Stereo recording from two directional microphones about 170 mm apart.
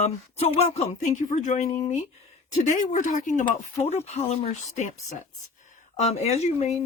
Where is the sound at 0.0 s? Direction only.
35° left (ahead or behind).